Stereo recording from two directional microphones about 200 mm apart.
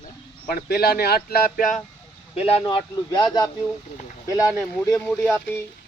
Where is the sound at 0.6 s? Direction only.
50° left (ahead or behind).